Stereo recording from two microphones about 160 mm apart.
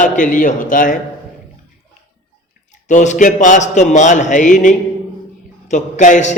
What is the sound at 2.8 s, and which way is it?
A man's voice, 50° left (ahead or behind).